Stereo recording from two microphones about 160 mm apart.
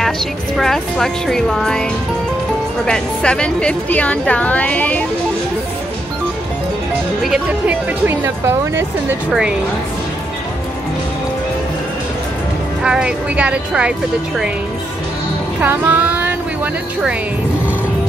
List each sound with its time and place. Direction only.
0.6 s a woman's voice: centre (ahead or behind)
7.2 s speech: 5° right (ahead or behind)
12.8 s speech: 5° right (ahead or behind)
15.6 s a sound: 10° right (ahead or behind)